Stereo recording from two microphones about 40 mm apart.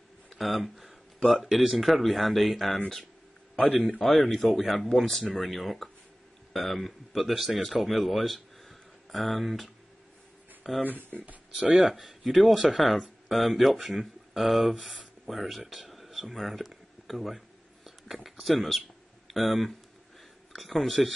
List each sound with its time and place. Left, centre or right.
0.3 s speech: centre
4.0 s speech: centre
10.8 s speech: right
11.7 s speech: centre
17.8 s a sound: centre
20.5 s speech: centre